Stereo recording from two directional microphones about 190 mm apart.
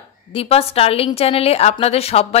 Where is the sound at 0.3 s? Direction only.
30° left (ahead or behind).